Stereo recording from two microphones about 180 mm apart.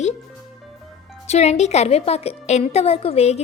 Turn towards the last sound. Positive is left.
turn(degrees=35)  # may be behind; listen again after turning